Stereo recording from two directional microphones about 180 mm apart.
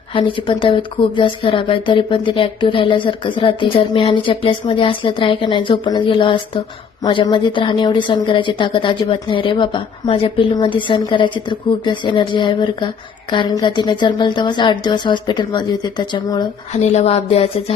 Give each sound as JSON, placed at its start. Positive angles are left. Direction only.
{"t": 0.1, "sound": "speech", "side_deg": 30}